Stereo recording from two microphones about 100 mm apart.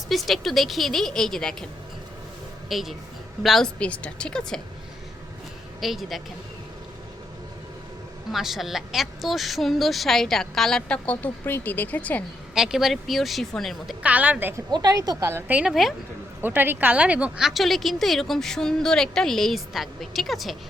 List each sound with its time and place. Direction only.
0.1 s a woman's voice: centre (ahead or behind)
2.6 s a woman's voice: centre (ahead or behind)
5.8 s a woman's voice: centre (ahead or behind)
8.3 s a woman's voice: centre (ahead or behind); by 12.2 s 15° left (ahead or behind)
12.5 s a woman's voice: 5° right (ahead or behind)
14.0 s a woman's voice: 15° right (ahead or behind)
14.7 s a woman's voice: 40° right (ahead or behind)
15.3 s a woman's voice: 25° right (ahead or behind)
15.7 s a woman's voice: centre (ahead or behind)
16.4 s a woman's voice: 20° right (ahead or behind); by 20.6 s centre (ahead or behind)